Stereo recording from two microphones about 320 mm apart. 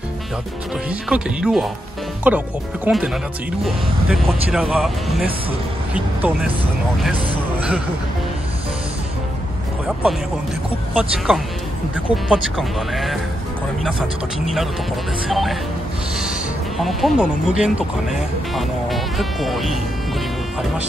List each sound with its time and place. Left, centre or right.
0.8 s speech: centre
11.0 s speech: centre
14.4 s speech: centre
16.7 s speech: centre